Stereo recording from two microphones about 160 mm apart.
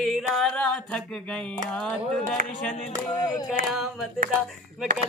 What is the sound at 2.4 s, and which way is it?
Music, 60° right (ahead or behind).